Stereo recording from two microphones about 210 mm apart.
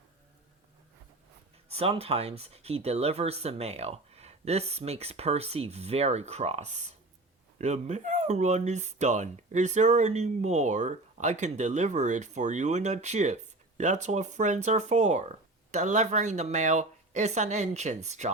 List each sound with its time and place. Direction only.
1.7 s speech: 30° right (ahead or behind)